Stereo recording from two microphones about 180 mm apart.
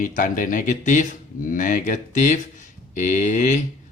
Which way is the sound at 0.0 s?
50° left (ahead or behind).